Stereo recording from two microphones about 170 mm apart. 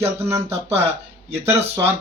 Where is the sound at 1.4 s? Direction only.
15° right (ahead or behind).